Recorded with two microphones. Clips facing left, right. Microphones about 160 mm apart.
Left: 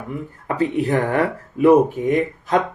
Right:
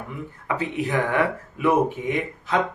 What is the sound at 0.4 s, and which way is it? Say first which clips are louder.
Speech: left 6 dB; 40° left (ahead or behind).